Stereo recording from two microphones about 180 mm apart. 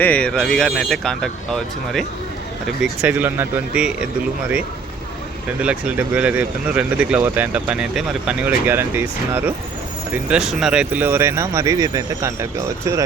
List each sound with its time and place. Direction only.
0.0 s speech: 5° left (ahead or behind)
2.8 s speech: 10° right (ahead or behind)
5.5 s speech: 5° right (ahead or behind)